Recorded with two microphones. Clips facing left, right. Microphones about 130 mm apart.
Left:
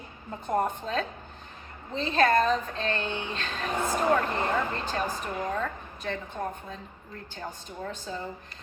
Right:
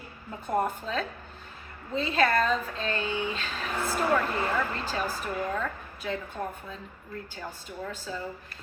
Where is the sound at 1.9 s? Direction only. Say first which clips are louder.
Right 1 dB; 10° right (ahead or behind).